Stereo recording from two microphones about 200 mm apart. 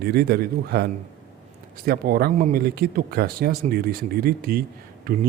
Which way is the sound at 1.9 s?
50° right (ahead or behind).